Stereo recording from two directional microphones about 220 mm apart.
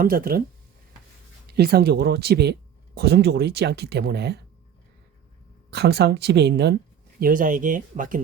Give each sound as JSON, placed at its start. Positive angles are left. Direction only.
{"t": 0.0, "sound": "speech", "side_deg": -40}
{"t": 1.5, "sound": "speech", "side_deg": -45}
{"t": 5.7, "sound": "speech", "side_deg": -50}